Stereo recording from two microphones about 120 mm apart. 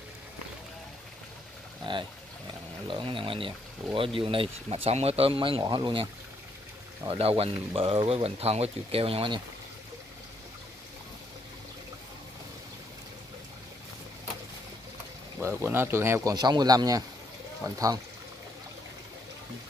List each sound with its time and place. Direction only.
2.9 s speech: 45° right (ahead or behind)
7.1 s speech: 50° right (ahead or behind)
15.3 s speech: 20° right (ahead or behind)
16.3 s speech: 35° right (ahead or behind)